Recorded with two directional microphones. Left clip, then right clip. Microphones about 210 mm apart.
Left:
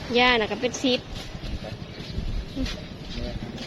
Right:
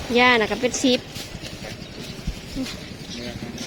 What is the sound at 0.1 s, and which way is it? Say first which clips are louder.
Speech: right 3 dB; 15° right (ahead or behind).